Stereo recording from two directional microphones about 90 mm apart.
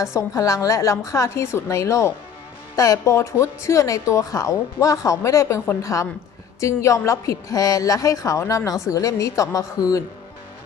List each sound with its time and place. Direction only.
0.0 s speech: 35° left (ahead or behind)